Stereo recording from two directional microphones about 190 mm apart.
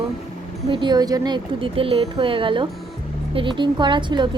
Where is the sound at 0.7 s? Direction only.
25° right (ahead or behind).